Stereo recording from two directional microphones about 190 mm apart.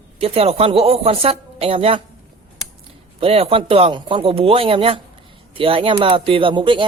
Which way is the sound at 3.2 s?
30° right (ahead or behind).